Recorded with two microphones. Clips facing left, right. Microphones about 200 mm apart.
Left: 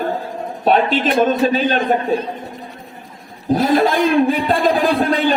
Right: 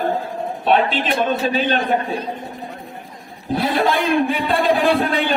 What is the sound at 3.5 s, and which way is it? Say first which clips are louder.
A man's voice: left 4 dB; 40° left (ahead or behind).